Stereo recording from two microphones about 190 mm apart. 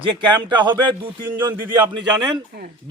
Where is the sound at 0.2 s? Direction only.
25° right (ahead or behind).